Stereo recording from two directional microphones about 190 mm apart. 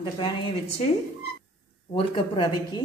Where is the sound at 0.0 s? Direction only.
25° left (ahead or behind).